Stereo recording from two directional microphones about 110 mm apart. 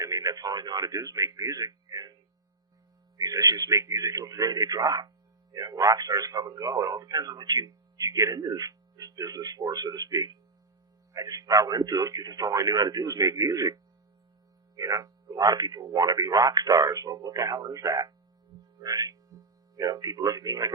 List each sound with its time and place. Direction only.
0.0 s speech: 30° right (ahead or behind)
3.2 s a man's voice: 35° right (ahead or behind)
14.8 s a man's voice: 30° right (ahead or behind)